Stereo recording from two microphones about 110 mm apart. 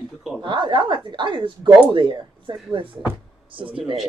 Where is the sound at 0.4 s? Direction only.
45° right (ahead or behind).